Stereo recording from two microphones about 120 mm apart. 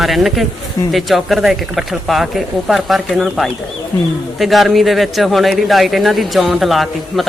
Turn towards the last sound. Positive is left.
turn(degrees=0)  # may be behind; listen again after turning